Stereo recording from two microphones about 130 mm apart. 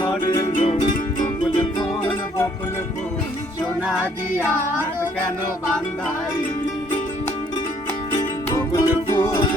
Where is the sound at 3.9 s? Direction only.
15° right (ahead or behind).